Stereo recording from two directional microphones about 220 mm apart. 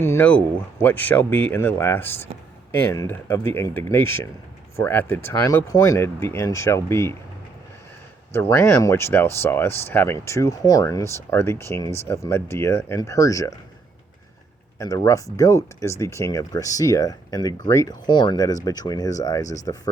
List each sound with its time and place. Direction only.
0.0 s speech: 10° left (ahead or behind)
8.3 s speech: 10° left (ahead or behind)
14.8 s speech: 15° left (ahead or behind)